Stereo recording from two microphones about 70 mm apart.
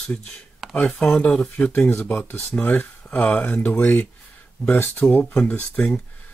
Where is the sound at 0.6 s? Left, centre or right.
Centre.